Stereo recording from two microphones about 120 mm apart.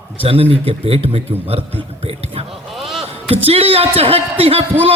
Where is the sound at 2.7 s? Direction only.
Centre (ahead or behind).